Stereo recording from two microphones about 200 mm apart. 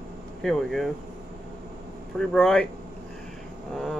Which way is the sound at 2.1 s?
Centre (ahead or behind).